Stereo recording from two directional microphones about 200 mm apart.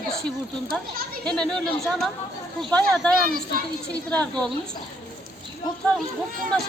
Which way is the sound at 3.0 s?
5° left (ahead or behind).